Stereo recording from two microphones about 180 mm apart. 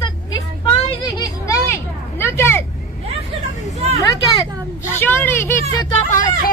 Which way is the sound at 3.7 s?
35° right (ahead or behind).